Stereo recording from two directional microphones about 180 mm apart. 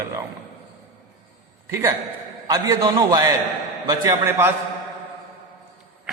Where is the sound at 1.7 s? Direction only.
15° right (ahead or behind).